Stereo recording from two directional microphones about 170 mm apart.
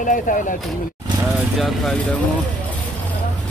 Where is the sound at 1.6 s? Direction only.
Centre (ahead or behind).